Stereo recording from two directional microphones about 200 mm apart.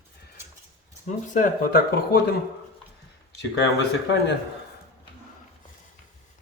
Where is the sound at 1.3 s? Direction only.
45° left (ahead or behind).